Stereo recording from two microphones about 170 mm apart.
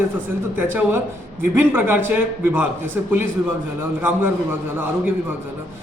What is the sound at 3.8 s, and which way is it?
A man's voice, 15° right (ahead or behind).